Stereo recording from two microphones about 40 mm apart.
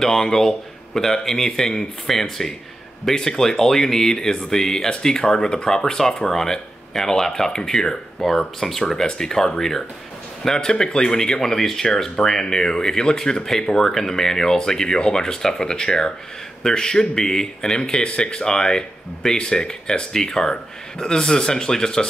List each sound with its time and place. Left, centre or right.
0.0 s speech: centre